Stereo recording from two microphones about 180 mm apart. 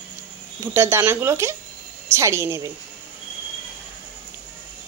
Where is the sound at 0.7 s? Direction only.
15° right (ahead or behind).